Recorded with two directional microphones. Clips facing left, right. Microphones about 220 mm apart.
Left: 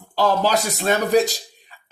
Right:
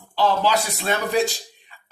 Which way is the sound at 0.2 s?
40° left (ahead or behind).